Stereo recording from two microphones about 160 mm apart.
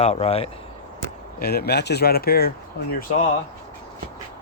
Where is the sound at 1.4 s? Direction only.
80° left.